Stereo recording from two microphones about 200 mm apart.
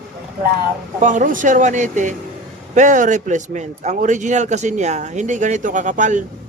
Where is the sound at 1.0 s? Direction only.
40° right (ahead or behind).